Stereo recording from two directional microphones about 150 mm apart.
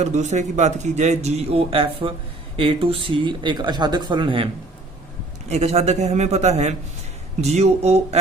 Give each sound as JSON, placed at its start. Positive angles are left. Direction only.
{"t": 0.0, "sound": "speech", "side_deg": -50}
{"t": 5.5, "sound": "speech", "side_deg": -45}